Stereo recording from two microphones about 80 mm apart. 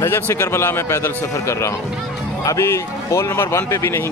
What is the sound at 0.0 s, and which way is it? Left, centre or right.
Speech, left.